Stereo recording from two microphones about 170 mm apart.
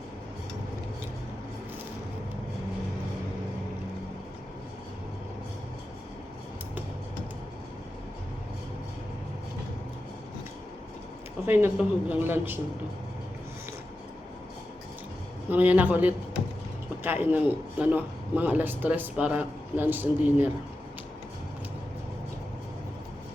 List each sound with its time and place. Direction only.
11.4 s a man's voice: 10° right (ahead or behind)
15.4 s a man's voice: 10° right (ahead or behind)